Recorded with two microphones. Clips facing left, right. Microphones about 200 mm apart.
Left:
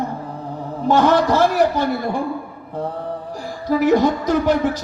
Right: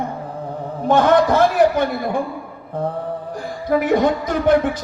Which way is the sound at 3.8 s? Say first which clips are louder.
Left 4 dB; 55° right (ahead or behind).